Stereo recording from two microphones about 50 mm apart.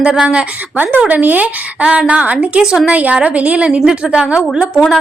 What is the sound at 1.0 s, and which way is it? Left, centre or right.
A woman's voice, right.